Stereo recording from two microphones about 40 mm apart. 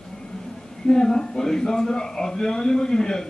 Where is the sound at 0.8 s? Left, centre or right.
Centre.